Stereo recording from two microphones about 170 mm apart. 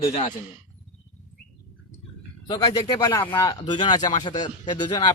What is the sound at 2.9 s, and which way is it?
A man's voice, 20° left (ahead or behind).